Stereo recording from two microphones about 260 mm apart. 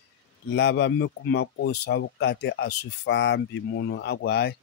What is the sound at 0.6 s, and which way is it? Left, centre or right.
Speech, left.